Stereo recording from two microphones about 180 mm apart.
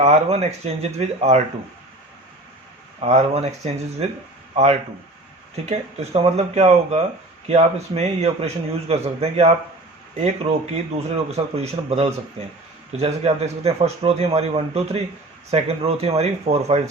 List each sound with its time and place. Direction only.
0.0 s a man's voice: 35° right (ahead or behind)
3.0 s a man's voice: 35° right (ahead or behind)
11.3 s a man's voice: 35° right (ahead or behind)